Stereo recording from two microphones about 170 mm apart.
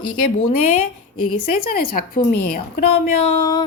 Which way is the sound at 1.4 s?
60° left (ahead or behind).